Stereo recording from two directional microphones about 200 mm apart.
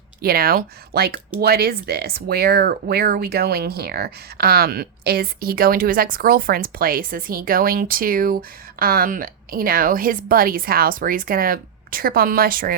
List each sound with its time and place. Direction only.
0.2 s speech: 50° right (ahead or behind)